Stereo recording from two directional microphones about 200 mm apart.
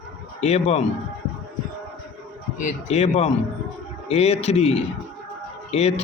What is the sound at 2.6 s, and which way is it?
A man's voice, 35° left (ahead or behind).